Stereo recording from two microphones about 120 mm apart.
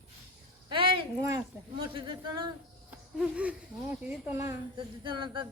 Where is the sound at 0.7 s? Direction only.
45° right (ahead or behind).